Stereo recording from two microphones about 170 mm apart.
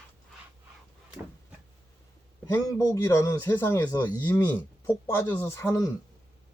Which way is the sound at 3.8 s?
25° left (ahead or behind).